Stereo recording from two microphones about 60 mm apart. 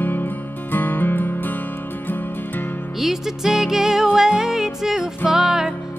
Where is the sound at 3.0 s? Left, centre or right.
Centre.